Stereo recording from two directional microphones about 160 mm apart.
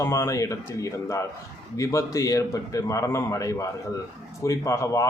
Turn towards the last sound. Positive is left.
turn(degrees=20)  # may be behind; listen again after turning